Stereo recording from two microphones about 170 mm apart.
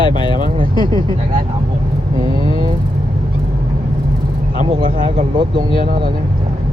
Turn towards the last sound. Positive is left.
turn(degrees=-30)  # may be behind; listen again after turning